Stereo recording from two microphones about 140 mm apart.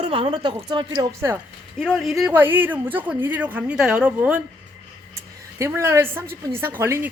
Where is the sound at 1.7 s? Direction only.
Centre (ahead or behind).